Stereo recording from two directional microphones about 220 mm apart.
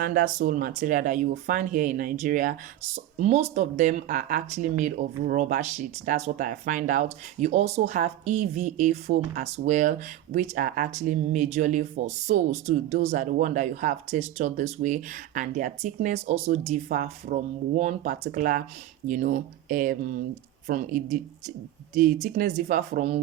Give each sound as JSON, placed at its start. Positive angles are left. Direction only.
{"t": 0.0, "sound": "speech", "side_deg": -40}